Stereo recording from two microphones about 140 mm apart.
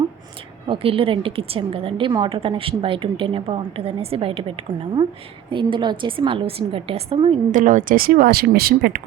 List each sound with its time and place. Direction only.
0.7 s a woman's voice: 40° right (ahead or behind)
7.5 s speech: 65° right (ahead or behind); by 9.0 s 90° right